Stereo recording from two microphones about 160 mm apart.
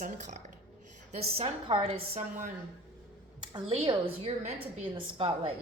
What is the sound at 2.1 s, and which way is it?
Speech, 50° right (ahead or behind).